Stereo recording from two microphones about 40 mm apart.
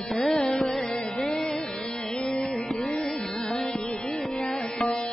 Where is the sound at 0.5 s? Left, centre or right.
Centre; by 3.0 s left.